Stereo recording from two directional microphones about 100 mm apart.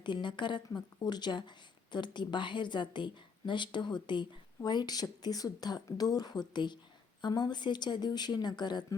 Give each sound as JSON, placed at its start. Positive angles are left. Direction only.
{"t": 0.0, "sound": "speech", "side_deg": 50}